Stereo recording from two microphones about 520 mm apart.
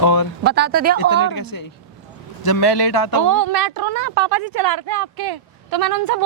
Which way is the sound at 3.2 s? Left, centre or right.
Right.